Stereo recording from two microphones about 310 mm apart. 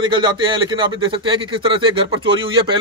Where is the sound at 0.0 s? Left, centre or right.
Centre.